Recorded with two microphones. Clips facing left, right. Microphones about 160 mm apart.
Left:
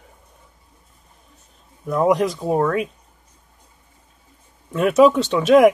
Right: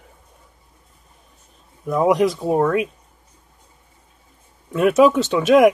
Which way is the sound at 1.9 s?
Centre (ahead or behind).